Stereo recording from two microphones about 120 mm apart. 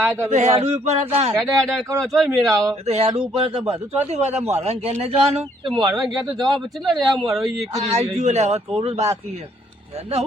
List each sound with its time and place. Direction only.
0.0 s speech: 20° right (ahead or behind)
0.3 s speech: 75° right (ahead or behind)
0.6 s a man's voice: 60° right (ahead or behind)
1.3 s speech: centre (ahead or behind)
2.8 s a man's voice: 65° right (ahead or behind)
5.6 s speech: 35° right (ahead or behind)
6.2 s speech: centre (ahead or behind)
7.7 s a man's voice: 65° right (ahead or behind)